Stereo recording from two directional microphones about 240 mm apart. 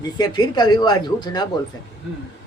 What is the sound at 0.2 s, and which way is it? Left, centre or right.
Speech, centre.